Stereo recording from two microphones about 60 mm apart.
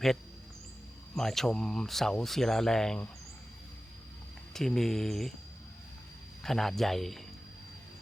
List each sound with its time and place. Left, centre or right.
1.1 s speech: centre
4.5 s speech: centre
6.4 s speech: centre